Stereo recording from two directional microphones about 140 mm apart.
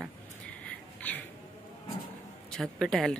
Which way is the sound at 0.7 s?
10° left (ahead or behind).